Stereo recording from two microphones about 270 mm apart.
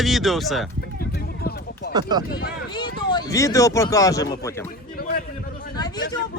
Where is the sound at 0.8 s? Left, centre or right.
Left.